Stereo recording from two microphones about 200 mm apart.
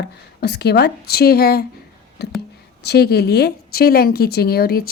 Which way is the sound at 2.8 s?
55° left (ahead or behind).